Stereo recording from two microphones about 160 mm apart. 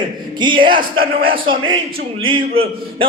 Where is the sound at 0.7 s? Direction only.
65° right (ahead or behind).